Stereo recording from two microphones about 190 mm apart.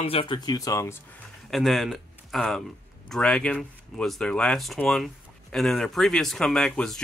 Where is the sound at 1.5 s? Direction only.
Centre (ahead or behind).